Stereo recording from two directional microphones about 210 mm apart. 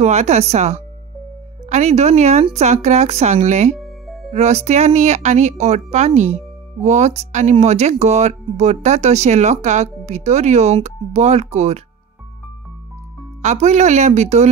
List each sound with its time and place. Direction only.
0.0 s speech: 30° right (ahead or behind)
3.7 s music: centre (ahead or behind)
4.3 s speech: 30° right (ahead or behind)
13.4 s speech: 35° right (ahead or behind)